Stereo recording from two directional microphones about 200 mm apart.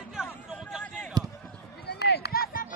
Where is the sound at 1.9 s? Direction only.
55° left (ahead or behind).